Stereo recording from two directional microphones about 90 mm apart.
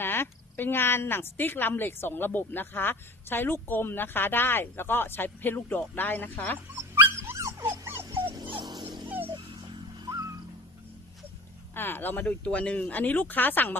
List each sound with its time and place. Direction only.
0.0 s a woman's voice: 25° left (ahead or behind)
6.9 s dog: 30° right (ahead or behind)
8.4 s dog: 60° right (ahead or behind)
11.7 s a woman's voice: 25° left (ahead or behind)